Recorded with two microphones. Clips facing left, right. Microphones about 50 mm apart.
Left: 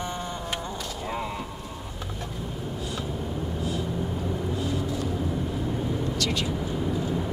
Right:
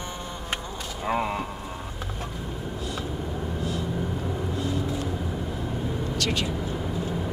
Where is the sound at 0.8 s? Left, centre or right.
Centre.